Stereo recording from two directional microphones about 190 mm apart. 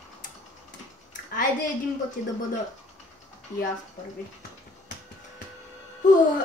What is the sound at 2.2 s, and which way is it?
Speech, 50° left (ahead or behind).